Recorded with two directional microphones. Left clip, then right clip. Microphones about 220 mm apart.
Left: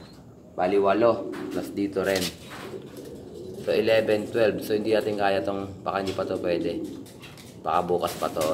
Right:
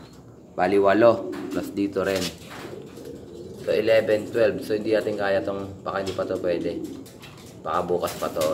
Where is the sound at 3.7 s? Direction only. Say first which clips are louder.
Right 2 dB; 10° left (ahead or behind).